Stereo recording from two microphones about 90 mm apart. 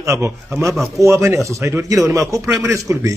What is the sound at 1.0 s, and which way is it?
A man's voice, 30° right (ahead or behind).